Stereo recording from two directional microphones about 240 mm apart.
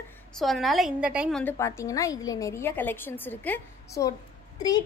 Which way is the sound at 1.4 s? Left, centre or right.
Centre.